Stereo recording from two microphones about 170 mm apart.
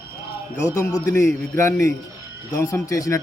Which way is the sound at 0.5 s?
15° left (ahead or behind).